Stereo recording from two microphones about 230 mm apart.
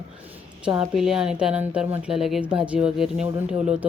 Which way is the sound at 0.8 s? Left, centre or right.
Centre.